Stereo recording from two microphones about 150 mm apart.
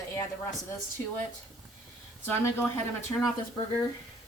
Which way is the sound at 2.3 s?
15° left (ahead or behind).